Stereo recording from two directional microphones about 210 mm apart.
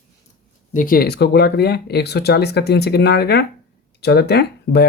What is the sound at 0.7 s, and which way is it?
Speech, 40° left (ahead or behind).